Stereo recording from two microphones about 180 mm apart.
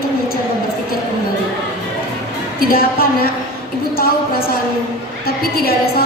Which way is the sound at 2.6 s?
55° left (ahead or behind).